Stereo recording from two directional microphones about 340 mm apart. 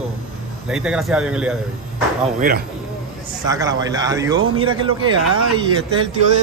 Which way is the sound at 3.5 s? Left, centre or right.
Centre.